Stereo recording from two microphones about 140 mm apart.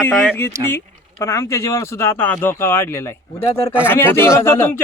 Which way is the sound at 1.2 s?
20° left (ahead or behind).